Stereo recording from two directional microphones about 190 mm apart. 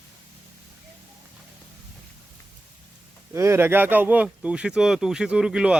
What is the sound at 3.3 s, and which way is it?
Speech, 15° right (ahead or behind).